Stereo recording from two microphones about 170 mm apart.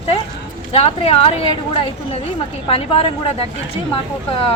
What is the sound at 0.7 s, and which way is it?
Speech, 35° left (ahead or behind).